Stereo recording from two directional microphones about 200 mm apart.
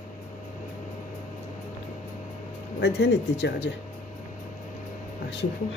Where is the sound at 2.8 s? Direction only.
60° left (ahead or behind).